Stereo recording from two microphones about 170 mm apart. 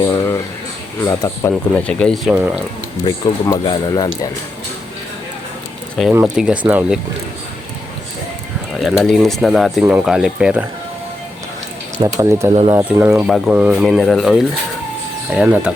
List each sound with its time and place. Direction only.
0.0 s speech: 20° left (ahead or behind)
1.7 s speech: 5° left (ahead or behind)
3.0 s speech: 20° left (ahead or behind)
6.1 s speech: 5° right (ahead or behind)
8.8 s speech: centre (ahead or behind)
11.9 s speech: 20° right (ahead or behind)
13.2 s speech: centre (ahead or behind)